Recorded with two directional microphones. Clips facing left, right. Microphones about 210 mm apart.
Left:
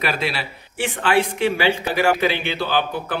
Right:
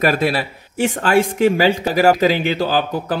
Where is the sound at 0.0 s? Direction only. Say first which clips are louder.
Right 7 dB; 50° right (ahead or behind).